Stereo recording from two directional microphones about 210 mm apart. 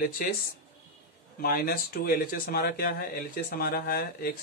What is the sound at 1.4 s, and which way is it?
Speech, 45° left (ahead or behind).